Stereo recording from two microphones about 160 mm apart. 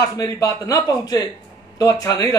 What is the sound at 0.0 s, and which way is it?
Speech, 20° left (ahead or behind).